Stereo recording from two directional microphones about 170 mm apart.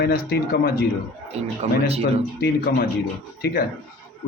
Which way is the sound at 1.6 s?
35° right (ahead or behind).